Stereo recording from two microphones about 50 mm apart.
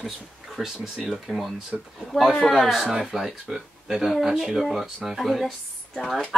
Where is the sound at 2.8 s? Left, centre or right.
Centre.